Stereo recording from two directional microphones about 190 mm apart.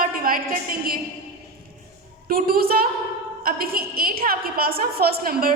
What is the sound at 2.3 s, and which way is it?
A woman's voice, 50° right (ahead or behind).